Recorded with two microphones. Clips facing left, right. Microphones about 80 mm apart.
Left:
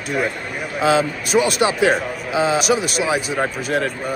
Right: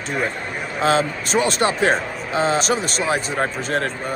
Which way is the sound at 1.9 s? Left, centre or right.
Centre.